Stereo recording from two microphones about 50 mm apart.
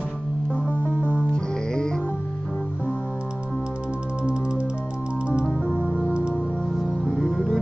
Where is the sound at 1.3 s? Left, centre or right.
Centre.